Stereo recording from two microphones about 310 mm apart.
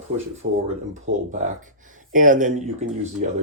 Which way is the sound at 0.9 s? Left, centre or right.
Right.